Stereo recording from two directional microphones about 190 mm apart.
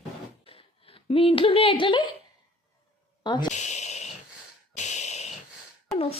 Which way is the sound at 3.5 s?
35° left (ahead or behind).